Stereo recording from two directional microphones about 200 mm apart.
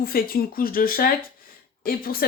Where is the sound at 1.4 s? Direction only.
50° left (ahead or behind).